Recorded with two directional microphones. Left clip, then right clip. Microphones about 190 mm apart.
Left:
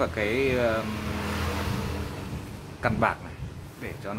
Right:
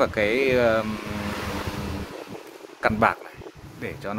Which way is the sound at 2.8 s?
55° right (ahead or behind).